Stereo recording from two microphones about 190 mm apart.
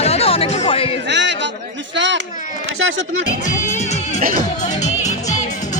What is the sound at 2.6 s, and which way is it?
Speech, 85° right.